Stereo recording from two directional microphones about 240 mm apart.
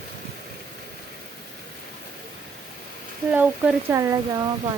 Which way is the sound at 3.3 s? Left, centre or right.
Centre.